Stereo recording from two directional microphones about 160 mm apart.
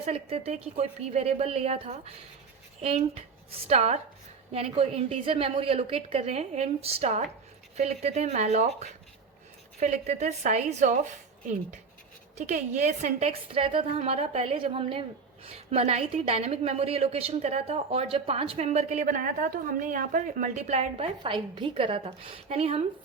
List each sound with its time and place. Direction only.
0.0 s a woman's voice: 40° right (ahead or behind)